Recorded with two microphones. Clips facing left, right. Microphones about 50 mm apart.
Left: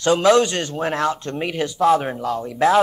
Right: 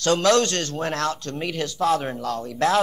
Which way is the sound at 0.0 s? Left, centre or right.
Centre.